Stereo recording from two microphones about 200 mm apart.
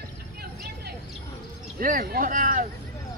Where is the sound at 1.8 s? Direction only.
45° right (ahead or behind).